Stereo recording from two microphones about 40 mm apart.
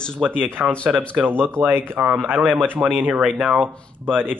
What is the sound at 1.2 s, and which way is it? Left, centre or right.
Speech, right.